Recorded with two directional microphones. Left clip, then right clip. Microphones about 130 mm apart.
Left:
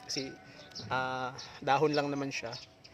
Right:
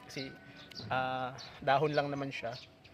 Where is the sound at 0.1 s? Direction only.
45° left (ahead or behind).